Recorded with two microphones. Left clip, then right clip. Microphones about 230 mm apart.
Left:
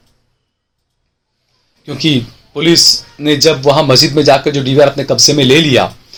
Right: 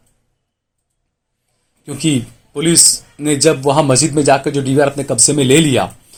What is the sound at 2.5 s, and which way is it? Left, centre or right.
A man's voice, right.